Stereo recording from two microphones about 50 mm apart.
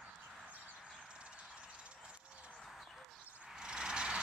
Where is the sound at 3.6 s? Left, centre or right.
Centre.